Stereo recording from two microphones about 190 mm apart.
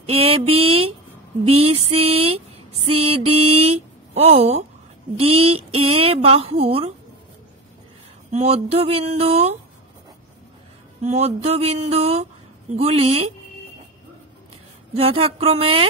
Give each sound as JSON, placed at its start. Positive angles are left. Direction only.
{"t": 0.1, "sound": "speech", "side_deg": -30}
{"t": 8.3, "sound": "speech", "side_deg": -35}
{"t": 11.1, "sound": "speech", "side_deg": -35}
{"t": 15.0, "sound": "speech", "side_deg": -30}